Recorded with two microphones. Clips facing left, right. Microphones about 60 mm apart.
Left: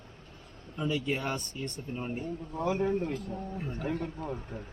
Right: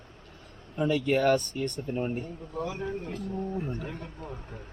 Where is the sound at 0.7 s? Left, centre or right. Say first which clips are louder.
Right 6 dB; right.